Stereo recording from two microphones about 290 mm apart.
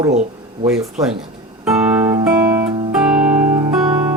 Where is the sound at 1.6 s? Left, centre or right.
Centre.